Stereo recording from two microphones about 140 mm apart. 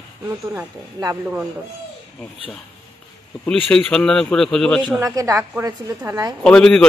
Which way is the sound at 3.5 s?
5° left (ahead or behind).